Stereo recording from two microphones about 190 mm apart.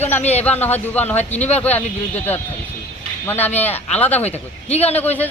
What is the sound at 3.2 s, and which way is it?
Speech, 10° left (ahead or behind).